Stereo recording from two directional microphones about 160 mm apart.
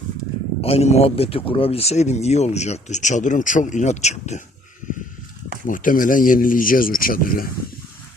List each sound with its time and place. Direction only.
0.6 s a man's voice: 40° left (ahead or behind)
5.6 s speech: 55° left (ahead or behind)